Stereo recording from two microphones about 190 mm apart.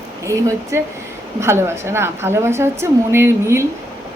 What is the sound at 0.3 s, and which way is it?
A woman's voice, 15° right (ahead or behind).